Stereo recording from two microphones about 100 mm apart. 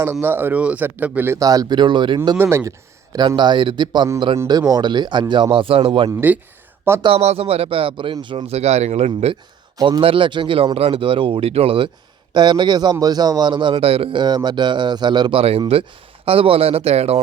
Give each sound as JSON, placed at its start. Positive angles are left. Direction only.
{"t": 0.0, "sound": "speech", "side_deg": -25}
{"t": 1.4, "sound": "a man's voice", "side_deg": -40}
{"t": 2.4, "sound": "speech", "side_deg": -30}
{"t": 3.2, "sound": "a man's voice", "side_deg": -50}
{"t": 7.1, "sound": "a man's voice", "side_deg": -85}
{"t": 8.4, "sound": "speech", "side_deg": -90}
{"t": 10.0, "sound": "speech", "side_deg": -60}
{"t": 10.8, "sound": "a man's voice", "side_deg": -75}
{"t": 12.3, "sound": "a man's voice", "side_deg": -50}
{"t": 13.7, "sound": "a man's voice", "side_deg": -75}
{"t": 14.2, "sound": "a man's voice", "side_deg": -45}
{"t": 15.4, "sound": "speech", "side_deg": -80}
{"t": 16.2, "sound": "speech", "side_deg": -70}